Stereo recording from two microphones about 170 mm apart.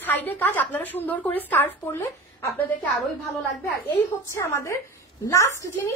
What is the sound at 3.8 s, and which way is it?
A woman's voice, 15° left (ahead or behind).